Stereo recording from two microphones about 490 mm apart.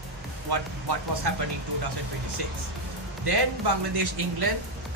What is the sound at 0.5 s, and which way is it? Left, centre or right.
Speech, right.